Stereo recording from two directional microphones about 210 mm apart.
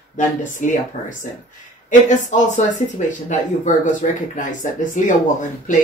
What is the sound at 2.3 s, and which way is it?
Speech, 40° left (ahead or behind).